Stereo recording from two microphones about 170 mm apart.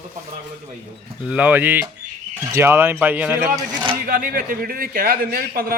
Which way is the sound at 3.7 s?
30° right (ahead or behind).